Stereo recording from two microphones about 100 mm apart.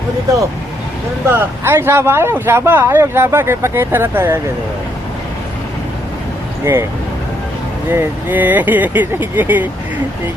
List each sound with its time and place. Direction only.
1.3 s speech: 25° right (ahead or behind)
6.7 s speech: 25° right (ahead or behind)
7.9 s speech: 20° right (ahead or behind)